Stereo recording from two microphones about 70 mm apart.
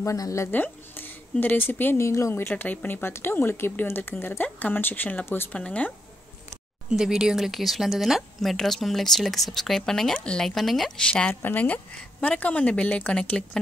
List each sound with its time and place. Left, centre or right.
0.0 s speech: left
0.5 s a woman's voice: left
2.0 s speech: left
2.5 s speech: left
5.5 s a woman's voice: centre
6.9 s speech: centre
11.1 s a woman's voice: centre